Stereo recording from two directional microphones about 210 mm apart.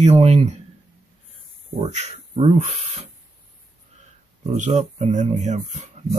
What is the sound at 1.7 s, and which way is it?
Speech, 30° right (ahead or behind).